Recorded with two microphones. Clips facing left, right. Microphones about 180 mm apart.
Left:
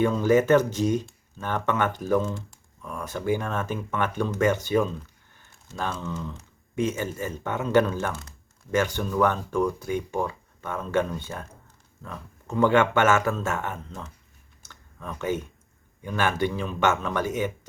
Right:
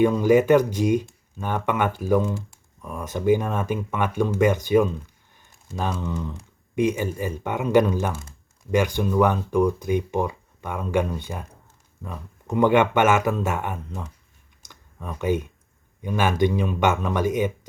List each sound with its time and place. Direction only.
0.0 s speech: 10° right (ahead or behind)
14.6 s computer keyboard: 15° right (ahead or behind)
16.0 s speech: 15° right (ahead or behind)